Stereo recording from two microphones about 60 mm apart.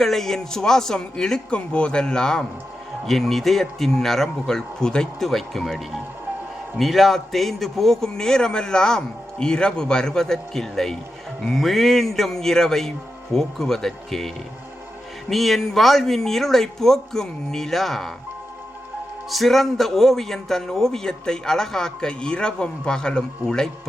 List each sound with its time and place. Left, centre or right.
0.0 s a man's voice: centre
19.3 s a man's voice: centre